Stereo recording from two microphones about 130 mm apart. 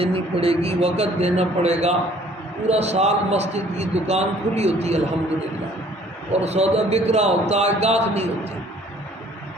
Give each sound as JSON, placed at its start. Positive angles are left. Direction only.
{"t": 0.0, "sound": "a man's voice", "side_deg": -50}
{"t": 6.3, "sound": "a man's voice", "side_deg": -55}